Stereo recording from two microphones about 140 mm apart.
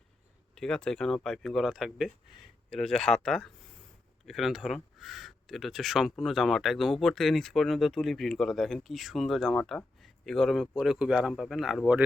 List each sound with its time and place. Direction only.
0.5 s speech: 5° left (ahead or behind)